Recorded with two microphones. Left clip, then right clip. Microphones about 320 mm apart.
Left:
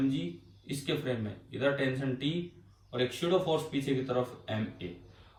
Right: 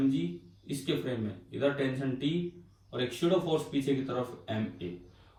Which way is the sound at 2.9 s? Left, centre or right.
Centre.